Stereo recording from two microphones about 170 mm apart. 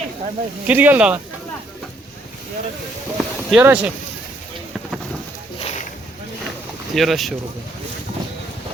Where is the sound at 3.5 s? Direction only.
10° right (ahead or behind).